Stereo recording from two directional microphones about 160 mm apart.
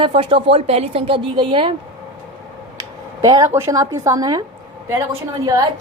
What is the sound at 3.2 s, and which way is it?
A woman's voice, 25° right (ahead or behind).